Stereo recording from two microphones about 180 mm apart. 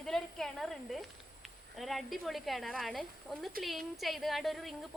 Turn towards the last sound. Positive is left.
turn(degrees=0)  # may be behind; listen again after turning